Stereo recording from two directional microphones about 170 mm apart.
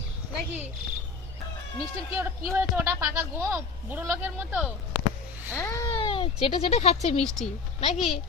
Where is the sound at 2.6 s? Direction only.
10° right (ahead or behind).